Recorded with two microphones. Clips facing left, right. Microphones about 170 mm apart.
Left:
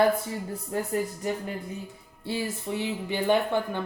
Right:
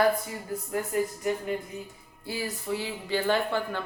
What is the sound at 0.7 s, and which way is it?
Speech, 30° left (ahead or behind).